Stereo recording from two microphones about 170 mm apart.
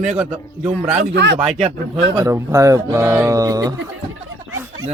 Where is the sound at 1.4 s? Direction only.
40° right (ahead or behind).